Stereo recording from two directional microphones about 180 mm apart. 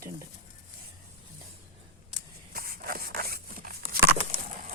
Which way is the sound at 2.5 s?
55° right (ahead or behind).